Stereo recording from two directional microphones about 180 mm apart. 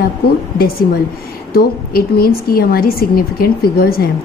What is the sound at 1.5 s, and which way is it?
A woman's voice, 55° left (ahead or behind).